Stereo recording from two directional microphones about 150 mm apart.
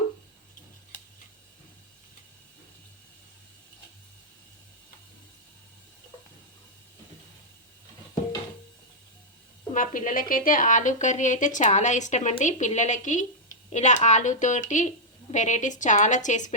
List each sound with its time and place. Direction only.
9.7 s a woman's voice: 60° left (ahead or behind)